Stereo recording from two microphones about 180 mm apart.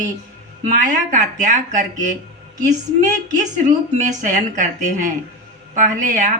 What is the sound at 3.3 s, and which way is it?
Speech, 40° right (ahead or behind).